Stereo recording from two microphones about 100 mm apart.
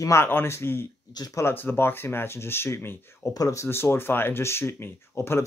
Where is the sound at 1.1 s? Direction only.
40° left (ahead or behind).